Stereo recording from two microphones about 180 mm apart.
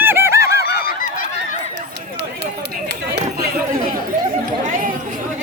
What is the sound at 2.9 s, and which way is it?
Chatter, 60° right (ahead or behind).